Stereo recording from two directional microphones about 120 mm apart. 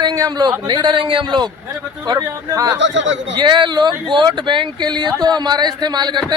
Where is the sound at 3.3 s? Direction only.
40° right (ahead or behind).